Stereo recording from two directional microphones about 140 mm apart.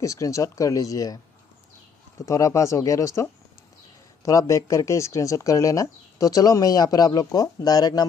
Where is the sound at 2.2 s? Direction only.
20° left (ahead or behind).